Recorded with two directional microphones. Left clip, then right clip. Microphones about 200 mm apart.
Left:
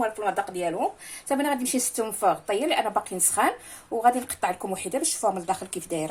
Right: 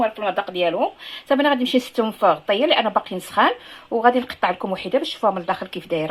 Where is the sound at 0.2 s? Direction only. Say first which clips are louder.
Right 5 dB; 30° right (ahead or behind).